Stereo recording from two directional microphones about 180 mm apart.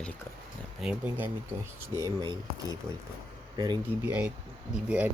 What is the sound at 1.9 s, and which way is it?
Speech, 25° right (ahead or behind).